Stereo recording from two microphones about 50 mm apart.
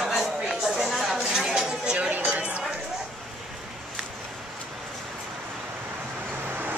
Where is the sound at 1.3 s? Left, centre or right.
Centre.